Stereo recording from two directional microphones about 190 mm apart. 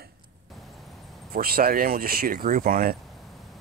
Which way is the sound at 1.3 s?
50° right (ahead or behind).